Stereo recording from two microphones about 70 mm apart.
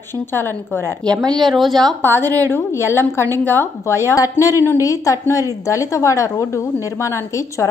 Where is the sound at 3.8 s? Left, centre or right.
Left.